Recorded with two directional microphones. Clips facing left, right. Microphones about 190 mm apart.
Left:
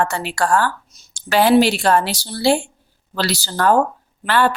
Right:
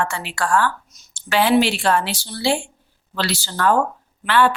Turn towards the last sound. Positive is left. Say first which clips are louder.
# even
turn(degrees=40)  # may be behind; listen again after turning